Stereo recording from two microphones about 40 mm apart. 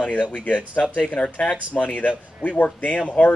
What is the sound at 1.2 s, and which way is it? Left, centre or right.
Speech, centre.